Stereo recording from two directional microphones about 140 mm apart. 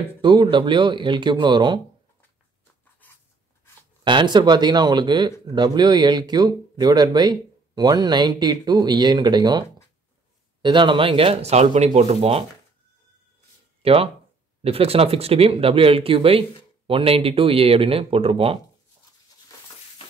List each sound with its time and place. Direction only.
0.2 s speech: 35° right (ahead or behind)
3.0 s writing: 10° left (ahead or behind)
4.0 s speech: 35° right (ahead or behind)
13.8 s speech: 45° right (ahead or behind)